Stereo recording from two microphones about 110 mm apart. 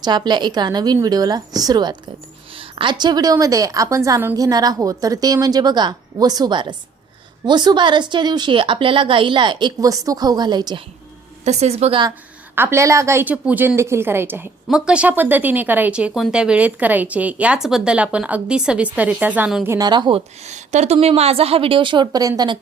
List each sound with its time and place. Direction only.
0.0 s a woman's voice: 40° right (ahead or behind)
2.6 s a woman's voice: 50° right (ahead or behind)
11.4 s a woman's voice: 85° right
12.5 s a woman's voice: 25° right (ahead or behind)
13.2 s a woman's voice: 15° right (ahead or behind)
14.7 s speech: 10° right (ahead or behind)
19.8 s speech: 40° right (ahead or behind)
20.1 s a woman's voice: 80° right; by 22.5 s 35° right (ahead or behind)